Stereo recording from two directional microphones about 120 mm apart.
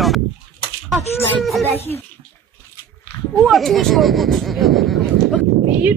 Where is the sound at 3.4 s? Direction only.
Centre (ahead or behind).